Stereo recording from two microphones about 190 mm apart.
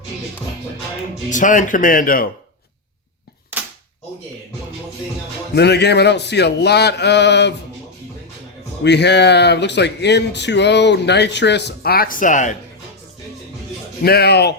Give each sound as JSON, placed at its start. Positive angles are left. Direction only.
{"t": 1.3, "sound": "speech", "side_deg": 40}
{"t": 5.5, "sound": "speech", "side_deg": 60}
{"t": 8.8, "sound": "speech", "side_deg": 65}
{"t": 14.0, "sound": "speech", "side_deg": 55}